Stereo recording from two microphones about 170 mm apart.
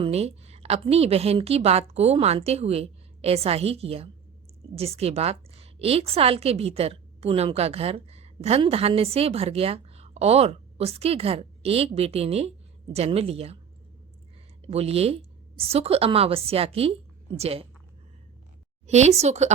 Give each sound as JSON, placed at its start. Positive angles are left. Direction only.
{"t": 0.0, "sound": "a woman's voice", "side_deg": -40}
{"t": 14.7, "sound": "a woman's voice", "side_deg": -35}
{"t": 18.9, "sound": "a woman's voice", "side_deg": -40}